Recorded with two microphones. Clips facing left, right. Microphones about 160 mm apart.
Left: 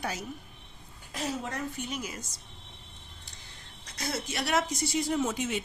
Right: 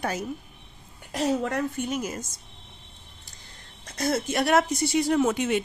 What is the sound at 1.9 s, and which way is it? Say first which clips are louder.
Speech: right 7 dB; 45° right (ahead or behind).